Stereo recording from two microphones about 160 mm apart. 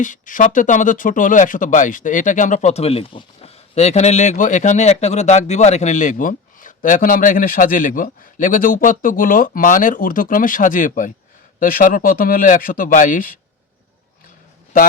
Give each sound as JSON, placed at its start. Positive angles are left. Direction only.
{"t": 0.0, "sound": "speech", "side_deg": 55}